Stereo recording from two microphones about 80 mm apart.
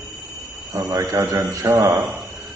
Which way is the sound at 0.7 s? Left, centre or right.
Right.